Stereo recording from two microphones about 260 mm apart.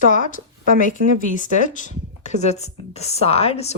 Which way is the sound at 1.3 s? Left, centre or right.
Left.